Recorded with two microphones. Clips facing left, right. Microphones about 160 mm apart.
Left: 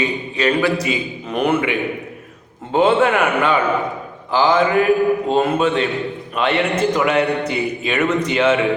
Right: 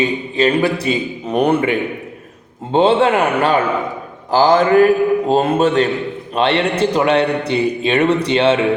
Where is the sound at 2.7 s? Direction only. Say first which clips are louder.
Right 2 dB; 30° right (ahead or behind).